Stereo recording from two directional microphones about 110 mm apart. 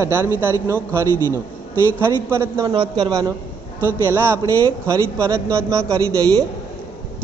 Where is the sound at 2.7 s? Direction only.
45° right (ahead or behind).